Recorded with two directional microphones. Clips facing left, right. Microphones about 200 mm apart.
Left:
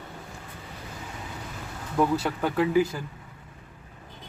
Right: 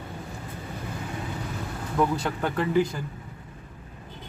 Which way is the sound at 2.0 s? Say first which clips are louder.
Left 1 dB; 5° left (ahead or behind).